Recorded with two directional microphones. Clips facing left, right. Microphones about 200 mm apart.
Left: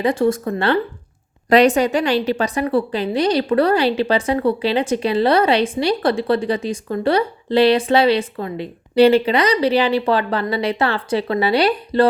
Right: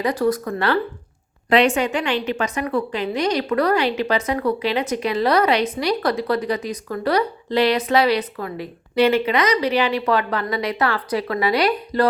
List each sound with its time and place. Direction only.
0.0 s a woman's voice: 25° left (ahead or behind)
1.5 s a woman's voice: 40° left (ahead or behind)